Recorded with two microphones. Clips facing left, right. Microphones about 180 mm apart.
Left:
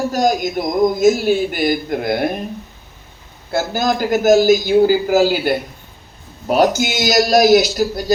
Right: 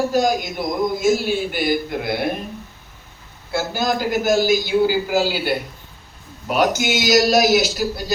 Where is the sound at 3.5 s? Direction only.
45° left (ahead or behind).